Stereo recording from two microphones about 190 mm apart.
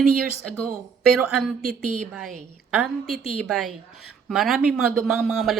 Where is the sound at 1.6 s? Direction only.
50° right (ahead or behind).